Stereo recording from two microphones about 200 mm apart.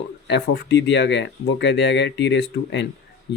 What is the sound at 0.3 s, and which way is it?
Speech, 55° left (ahead or behind).